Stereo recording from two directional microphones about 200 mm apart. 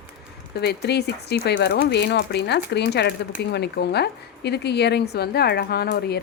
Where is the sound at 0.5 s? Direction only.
55° left (ahead or behind).